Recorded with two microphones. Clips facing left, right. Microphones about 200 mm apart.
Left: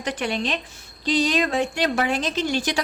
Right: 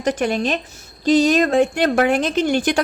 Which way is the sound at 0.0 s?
45° right (ahead or behind).